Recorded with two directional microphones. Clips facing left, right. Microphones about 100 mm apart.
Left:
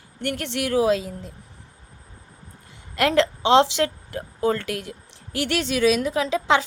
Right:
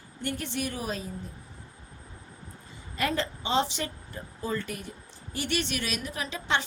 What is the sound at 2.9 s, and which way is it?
A woman's voice, 75° left (ahead or behind).